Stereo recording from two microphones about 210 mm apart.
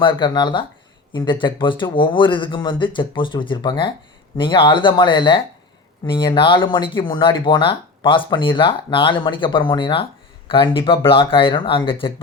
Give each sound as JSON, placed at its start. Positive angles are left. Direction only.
{"t": 0.0, "sound": "speech", "side_deg": 25}